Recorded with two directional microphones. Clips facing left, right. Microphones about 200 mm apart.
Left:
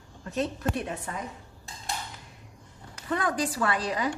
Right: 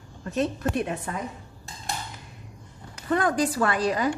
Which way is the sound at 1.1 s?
70° right (ahead or behind).